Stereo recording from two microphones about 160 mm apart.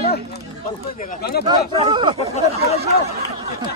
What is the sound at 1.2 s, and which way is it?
Speech, 80° left.